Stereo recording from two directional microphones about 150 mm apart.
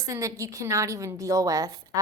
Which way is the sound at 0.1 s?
20° right (ahead or behind).